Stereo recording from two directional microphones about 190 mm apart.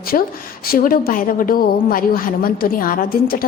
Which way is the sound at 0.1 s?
45° left (ahead or behind).